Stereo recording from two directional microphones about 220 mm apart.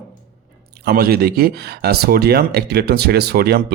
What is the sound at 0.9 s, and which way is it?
Speech, 40° right (ahead or behind).